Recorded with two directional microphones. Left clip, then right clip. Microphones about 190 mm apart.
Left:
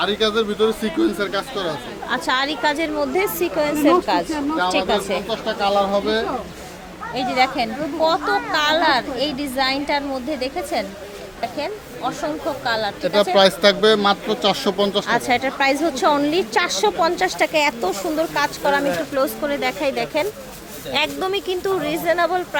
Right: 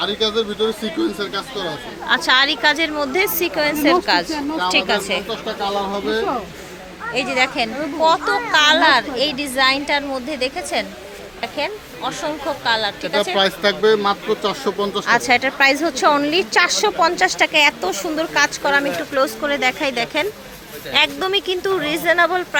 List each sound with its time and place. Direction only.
0.0 s a woman's voice: 10° left (ahead or behind)
5.5 s speech: 25° left (ahead or behind)
7.1 s a woman's voice: 5° right (ahead or behind)
13.3 s speech: 55° left (ahead or behind)
15.0 s a woman's voice: centre (ahead or behind)